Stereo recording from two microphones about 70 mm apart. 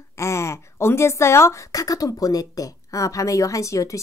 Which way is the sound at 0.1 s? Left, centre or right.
Left.